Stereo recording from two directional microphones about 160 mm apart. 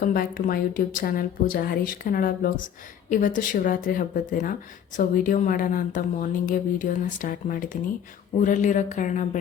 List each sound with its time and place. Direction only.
0.0 s a woman's voice: 60° left (ahead or behind)